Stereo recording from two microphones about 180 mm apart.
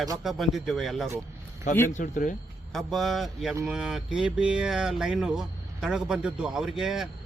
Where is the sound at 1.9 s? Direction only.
45° left (ahead or behind).